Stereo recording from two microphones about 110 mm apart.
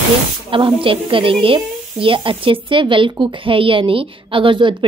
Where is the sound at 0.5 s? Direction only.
50° right (ahead or behind).